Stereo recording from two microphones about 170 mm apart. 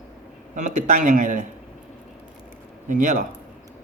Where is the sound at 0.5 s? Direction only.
45° right (ahead or behind).